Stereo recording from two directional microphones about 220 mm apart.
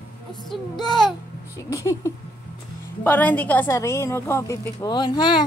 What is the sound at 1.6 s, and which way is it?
A woman's voice, 15° left (ahead or behind).